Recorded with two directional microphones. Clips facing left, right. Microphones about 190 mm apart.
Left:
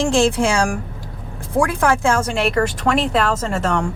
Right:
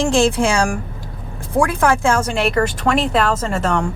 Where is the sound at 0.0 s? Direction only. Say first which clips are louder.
Right 1 dB; 10° right (ahead or behind).